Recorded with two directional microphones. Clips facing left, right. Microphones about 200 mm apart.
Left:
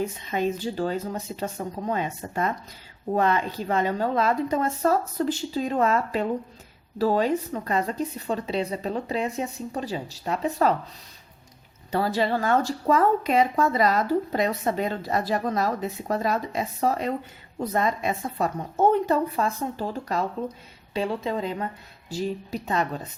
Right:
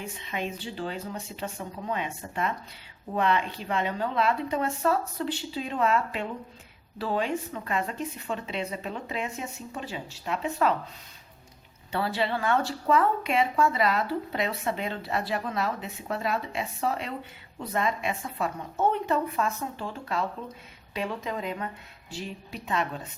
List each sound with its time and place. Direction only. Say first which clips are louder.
0.0 s speech: left 8 dB; 40° left (ahead or behind)
11.9 s speech: left 4 dB; 40° left (ahead or behind)